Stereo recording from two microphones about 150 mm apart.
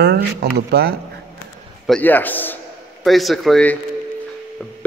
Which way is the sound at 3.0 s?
Centre (ahead or behind).